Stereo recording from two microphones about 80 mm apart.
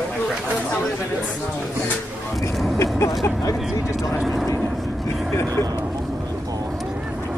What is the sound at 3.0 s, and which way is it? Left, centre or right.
Vehicle, left.